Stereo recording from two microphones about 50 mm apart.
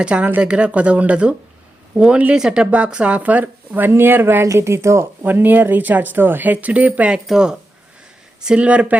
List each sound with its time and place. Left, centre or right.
0.0 s speech: right
4.6 s speech: right
5.2 s speech: right
7.1 s speech: centre